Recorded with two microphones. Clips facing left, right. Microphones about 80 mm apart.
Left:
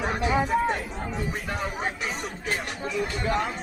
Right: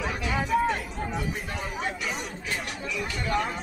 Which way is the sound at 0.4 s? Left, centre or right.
Left.